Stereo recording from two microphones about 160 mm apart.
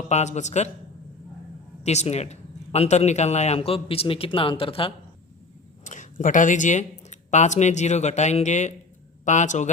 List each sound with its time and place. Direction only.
0.1 s a man's voice: 45° left (ahead or behind)
1.8 s a man's voice: 45° left (ahead or behind)
5.8 s a man's voice: 50° left (ahead or behind)